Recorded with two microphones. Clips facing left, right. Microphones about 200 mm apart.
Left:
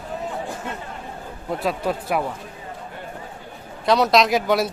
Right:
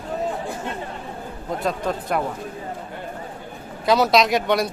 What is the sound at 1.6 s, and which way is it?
Speech, 5° left (ahead or behind).